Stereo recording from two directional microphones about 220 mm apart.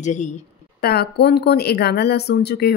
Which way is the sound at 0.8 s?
45° left (ahead or behind).